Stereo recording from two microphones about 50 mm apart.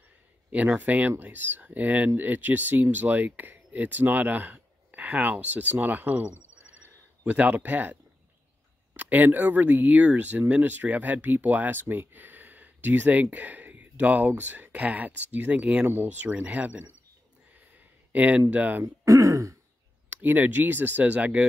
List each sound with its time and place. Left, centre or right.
0.5 s speech: right
15.8 s speech: right
16.2 s speech: right
19.0 s throat clearing: right
20.1 s speech: right